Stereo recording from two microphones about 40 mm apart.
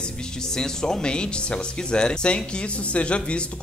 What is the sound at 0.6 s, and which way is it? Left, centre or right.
A man's voice, centre.